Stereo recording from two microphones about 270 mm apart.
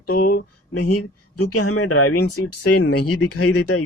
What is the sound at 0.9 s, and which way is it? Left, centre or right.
Speech, left.